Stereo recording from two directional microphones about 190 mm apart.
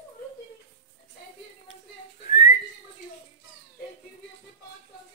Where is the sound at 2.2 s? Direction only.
35° left (ahead or behind).